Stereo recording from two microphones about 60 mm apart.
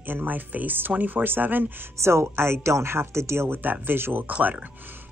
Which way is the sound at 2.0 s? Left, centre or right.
Right.